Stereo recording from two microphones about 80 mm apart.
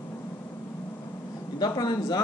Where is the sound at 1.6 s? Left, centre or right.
Left.